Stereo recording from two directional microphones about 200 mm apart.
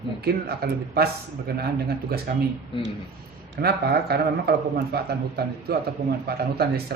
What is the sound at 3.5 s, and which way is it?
A man's voice, 50° right (ahead or behind).